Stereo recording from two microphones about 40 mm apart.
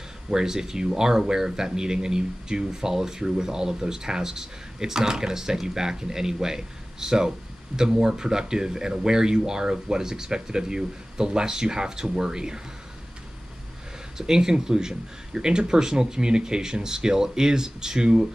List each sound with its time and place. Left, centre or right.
0.3 s speech: centre
14.1 s speech: centre